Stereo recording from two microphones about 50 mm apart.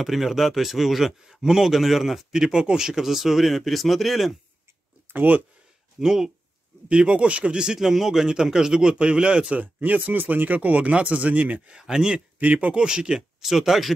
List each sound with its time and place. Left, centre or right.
0.0 s a man's voice: centre
5.1 s speech: right
5.9 s speech: centre
6.9 s speech: right
7.8 s speech: centre
9.6 s speech: right
11.8 s speech: centre
12.4 s speech: right
12.7 s speech: centre
13.5 s a man's voice: centre